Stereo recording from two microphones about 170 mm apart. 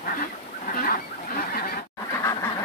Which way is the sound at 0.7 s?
55° left (ahead or behind).